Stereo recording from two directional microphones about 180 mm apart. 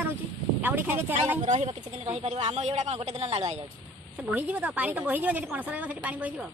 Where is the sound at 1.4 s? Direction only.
40° right (ahead or behind).